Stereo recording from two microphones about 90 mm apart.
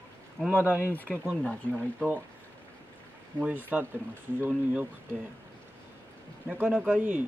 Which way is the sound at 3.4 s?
20° right (ahead or behind).